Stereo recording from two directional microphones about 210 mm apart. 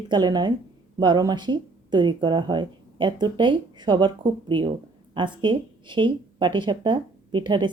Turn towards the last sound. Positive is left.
turn(degrees=-20)  # may be behind; listen again after turning